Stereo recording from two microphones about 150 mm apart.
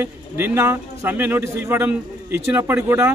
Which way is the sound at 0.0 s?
15° right (ahead or behind).